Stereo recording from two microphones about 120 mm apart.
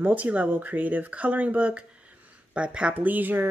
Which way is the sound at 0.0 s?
15° right (ahead or behind).